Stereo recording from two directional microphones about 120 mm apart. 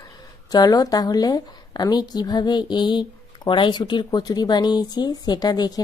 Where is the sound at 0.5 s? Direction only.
35° left (ahead or behind).